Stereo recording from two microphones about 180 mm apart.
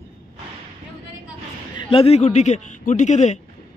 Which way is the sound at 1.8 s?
30° left (ahead or behind).